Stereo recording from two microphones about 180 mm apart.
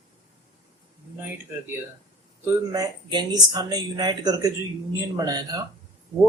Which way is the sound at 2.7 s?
20° right (ahead or behind).